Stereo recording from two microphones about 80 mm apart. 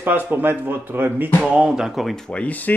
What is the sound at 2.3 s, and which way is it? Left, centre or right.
Speech, centre.